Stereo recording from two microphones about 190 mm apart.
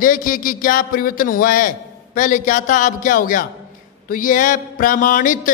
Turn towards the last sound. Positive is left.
turn(degrees=45)  # may be behind; listen again after turning